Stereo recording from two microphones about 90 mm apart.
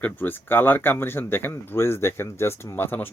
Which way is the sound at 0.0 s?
20° left (ahead or behind).